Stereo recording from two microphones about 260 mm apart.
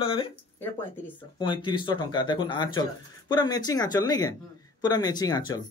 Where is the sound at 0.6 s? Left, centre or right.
Centre.